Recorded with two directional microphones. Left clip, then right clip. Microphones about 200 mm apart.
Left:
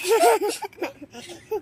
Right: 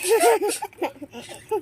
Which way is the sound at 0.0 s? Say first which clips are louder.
Even; 10° left (ahead or behind).